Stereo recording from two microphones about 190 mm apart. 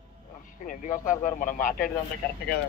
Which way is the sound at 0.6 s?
45° left (ahead or behind).